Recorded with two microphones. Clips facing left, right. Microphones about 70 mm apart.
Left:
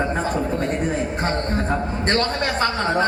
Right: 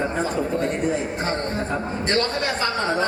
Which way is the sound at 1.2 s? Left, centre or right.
Left.